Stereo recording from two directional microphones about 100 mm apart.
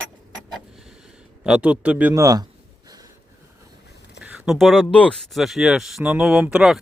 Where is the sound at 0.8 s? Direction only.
5° right (ahead or behind).